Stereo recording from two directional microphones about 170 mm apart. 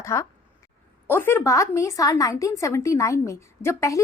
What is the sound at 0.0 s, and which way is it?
A woman's voice, 15° left (ahead or behind).